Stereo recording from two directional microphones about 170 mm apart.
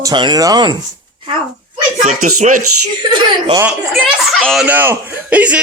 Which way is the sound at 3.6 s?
Centre (ahead or behind).